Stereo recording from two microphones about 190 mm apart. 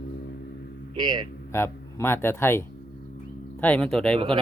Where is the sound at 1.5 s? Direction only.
15° left (ahead or behind).